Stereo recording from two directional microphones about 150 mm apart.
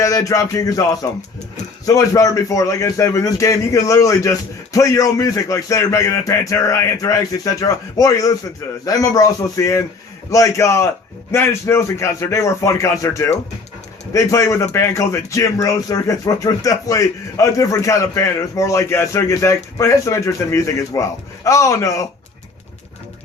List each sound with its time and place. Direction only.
0.0 s a man's voice: 20° left (ahead or behind)
1.9 s a man's voice: 20° left (ahead or behind)